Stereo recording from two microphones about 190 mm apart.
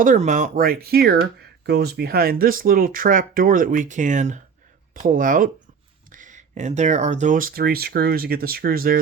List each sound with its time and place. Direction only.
0.0 s speech: 40° right (ahead or behind)